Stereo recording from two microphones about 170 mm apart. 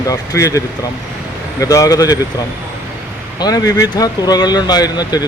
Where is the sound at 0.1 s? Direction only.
20° left (ahead or behind).